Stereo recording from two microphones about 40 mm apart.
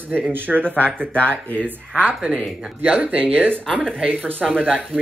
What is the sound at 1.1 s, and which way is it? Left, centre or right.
Speech, left.